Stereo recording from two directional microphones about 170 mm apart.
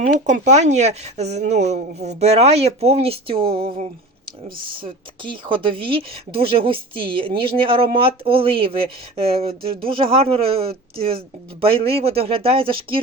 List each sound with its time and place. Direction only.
0.1 s speech: 45° right (ahead or behind)
5.9 s speech: 30° right (ahead or behind)